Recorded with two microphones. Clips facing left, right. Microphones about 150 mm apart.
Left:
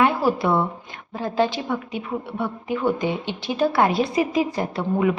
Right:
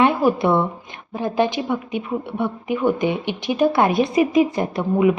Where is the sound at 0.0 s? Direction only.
20° right (ahead or behind).